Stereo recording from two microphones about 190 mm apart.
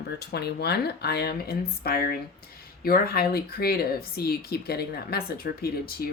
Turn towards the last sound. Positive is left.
turn(degrees=55)  # may be behind; listen again after turning